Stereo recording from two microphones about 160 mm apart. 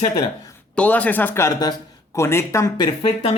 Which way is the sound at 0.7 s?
10° left (ahead or behind).